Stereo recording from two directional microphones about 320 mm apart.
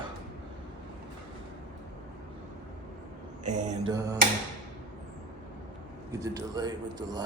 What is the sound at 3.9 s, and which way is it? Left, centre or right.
Speech, centre.